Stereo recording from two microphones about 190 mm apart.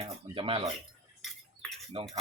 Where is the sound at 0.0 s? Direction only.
30° right (ahead or behind).